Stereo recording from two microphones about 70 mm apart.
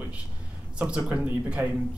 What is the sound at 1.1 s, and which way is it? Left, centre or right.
Speech, centre.